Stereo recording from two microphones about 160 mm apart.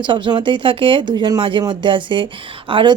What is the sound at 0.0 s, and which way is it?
Speech, 30° right (ahead or behind).